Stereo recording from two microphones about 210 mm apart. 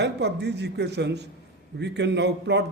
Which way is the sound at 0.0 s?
55° right (ahead or behind).